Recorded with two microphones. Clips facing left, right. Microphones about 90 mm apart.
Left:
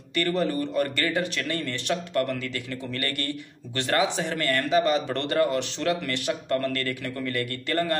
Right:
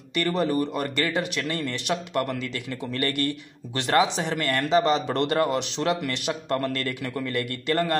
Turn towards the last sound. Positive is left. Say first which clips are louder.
# right 1 dB
turn(degrees=-20)  # may be behind; listen again after turning